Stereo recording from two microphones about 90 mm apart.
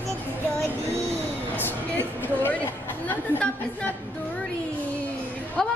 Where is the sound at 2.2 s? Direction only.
20° left (ahead or behind).